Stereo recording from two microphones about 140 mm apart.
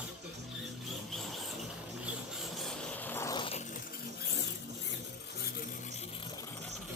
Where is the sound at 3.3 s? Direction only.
40° left (ahead or behind).